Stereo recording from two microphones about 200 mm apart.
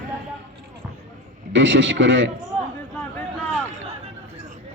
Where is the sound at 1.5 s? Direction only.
65° right (ahead or behind).